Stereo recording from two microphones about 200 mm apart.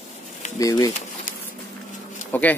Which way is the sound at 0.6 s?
15° left (ahead or behind).